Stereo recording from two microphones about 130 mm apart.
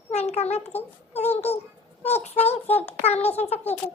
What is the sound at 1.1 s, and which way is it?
A child's voice, 55° left (ahead or behind).